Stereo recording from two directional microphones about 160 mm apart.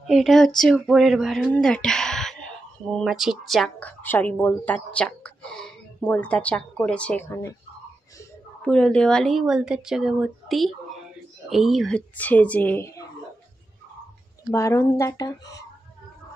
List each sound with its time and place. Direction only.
0.0 s speech: centre (ahead or behind)
7.2 s speech: 20° left (ahead or behind)
8.6 s speech: 5° left (ahead or behind)
14.5 s speech: 20° left (ahead or behind)